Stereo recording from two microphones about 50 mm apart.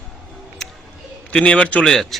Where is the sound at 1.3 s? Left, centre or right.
Left.